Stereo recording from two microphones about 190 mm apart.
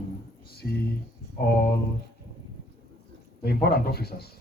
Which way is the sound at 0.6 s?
55° left (ahead or behind).